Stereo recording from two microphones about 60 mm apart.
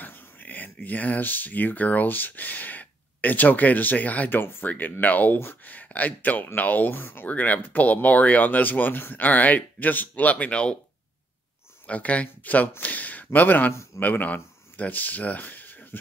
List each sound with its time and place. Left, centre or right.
0.0 s a sound: left
0.8 s speech: left
11.8 s speech: left